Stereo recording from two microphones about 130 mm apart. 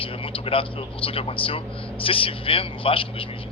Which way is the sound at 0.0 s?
45° left (ahead or behind).